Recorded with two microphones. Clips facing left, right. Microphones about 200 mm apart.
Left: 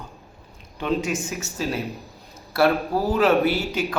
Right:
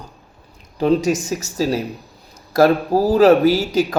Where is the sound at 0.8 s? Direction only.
35° right (ahead or behind).